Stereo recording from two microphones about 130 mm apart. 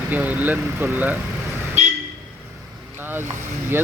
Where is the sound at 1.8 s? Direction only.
65° right (ahead or behind).